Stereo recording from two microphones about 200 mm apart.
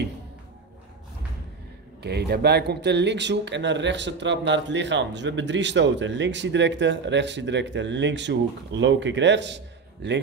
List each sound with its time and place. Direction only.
2.0 s speech: 55° right (ahead or behind)